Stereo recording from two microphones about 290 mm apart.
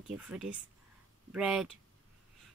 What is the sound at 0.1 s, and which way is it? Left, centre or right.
Speech, centre.